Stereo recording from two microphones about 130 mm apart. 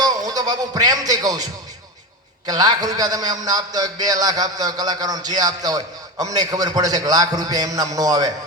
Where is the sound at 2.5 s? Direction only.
30° right (ahead or behind).